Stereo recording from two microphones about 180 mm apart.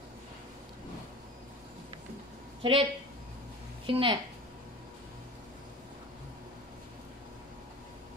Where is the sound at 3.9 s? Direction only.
30° right (ahead or behind).